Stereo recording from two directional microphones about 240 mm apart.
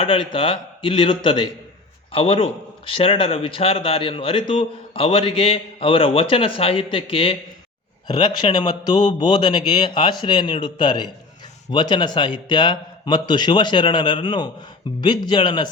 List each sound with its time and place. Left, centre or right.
0.0 s a man's voice: left